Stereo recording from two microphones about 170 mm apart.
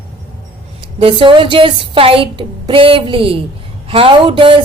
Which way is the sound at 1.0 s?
30° right (ahead or behind).